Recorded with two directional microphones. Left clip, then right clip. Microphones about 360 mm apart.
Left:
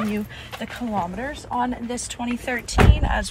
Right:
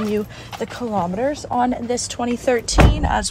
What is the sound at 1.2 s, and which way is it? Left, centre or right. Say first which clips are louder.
Speech: right 6 dB; right.